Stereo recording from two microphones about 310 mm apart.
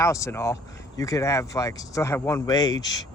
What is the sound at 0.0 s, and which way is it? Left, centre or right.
Speech, centre.